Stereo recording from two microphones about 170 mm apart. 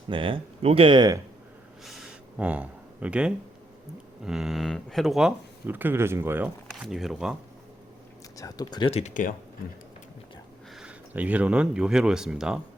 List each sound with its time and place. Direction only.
0.1 s speech: 30° right (ahead or behind)
1.8 s a sound: centre (ahead or behind)
4.2 s speech: centre (ahead or behind)
8.4 s speech: 20° left (ahead or behind)
8.9 s speech: 40° left (ahead or behind)
10.8 s speech: 5° right (ahead or behind)